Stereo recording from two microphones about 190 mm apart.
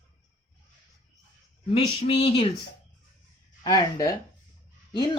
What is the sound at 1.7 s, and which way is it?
Speech, 30° left (ahead or behind).